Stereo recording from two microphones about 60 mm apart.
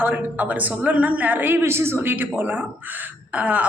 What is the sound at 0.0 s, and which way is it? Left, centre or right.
A woman's voice, right.